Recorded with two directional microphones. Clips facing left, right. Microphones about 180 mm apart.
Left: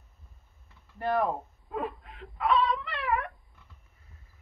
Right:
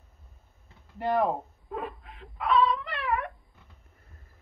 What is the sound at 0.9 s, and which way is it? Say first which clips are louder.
Speech: right 2 dB; 15° right (ahead or behind).